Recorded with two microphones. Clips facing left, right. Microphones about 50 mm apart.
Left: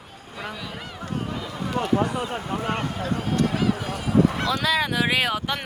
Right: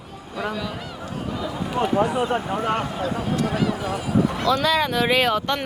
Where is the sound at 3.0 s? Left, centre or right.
Left.